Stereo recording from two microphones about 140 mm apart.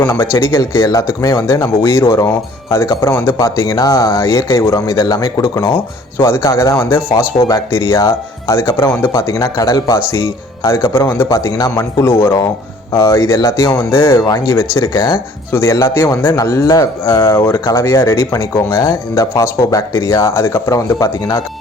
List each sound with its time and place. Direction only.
0.0 s speech: 20° left (ahead or behind)